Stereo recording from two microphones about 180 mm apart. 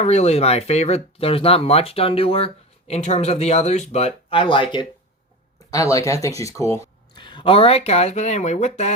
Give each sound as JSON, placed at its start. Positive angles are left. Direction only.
{"t": 0.0, "sound": "speech", "side_deg": 35}